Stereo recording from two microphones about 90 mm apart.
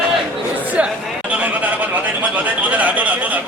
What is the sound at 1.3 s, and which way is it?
A man's voice, 15° right (ahead or behind).